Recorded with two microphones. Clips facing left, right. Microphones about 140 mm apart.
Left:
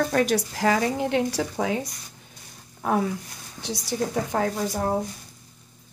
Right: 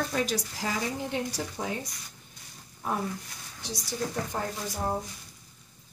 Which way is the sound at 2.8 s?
70° left (ahead or behind).